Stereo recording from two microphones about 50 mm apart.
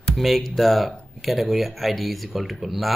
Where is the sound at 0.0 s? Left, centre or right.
Centre.